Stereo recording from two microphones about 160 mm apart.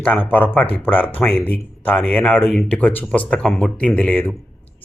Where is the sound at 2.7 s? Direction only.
10° left (ahead or behind).